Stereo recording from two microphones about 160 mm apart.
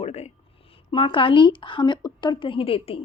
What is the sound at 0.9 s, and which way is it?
A woman's voice, 30° left (ahead or behind).